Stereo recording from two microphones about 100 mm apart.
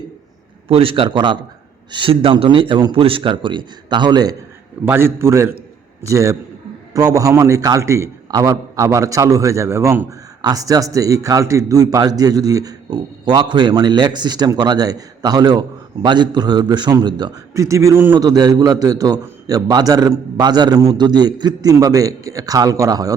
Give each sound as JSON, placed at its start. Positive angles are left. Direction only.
{"t": 0.7, "sound": "a man's voice", "side_deg": -65}
{"t": 4.9, "sound": "a man's voice", "side_deg": -25}
{"t": 10.4, "sound": "a man's voice", "side_deg": -35}
{"t": 17.5, "sound": "a man's voice", "side_deg": -30}
{"t": 18.1, "sound": "a man's voice", "side_deg": -40}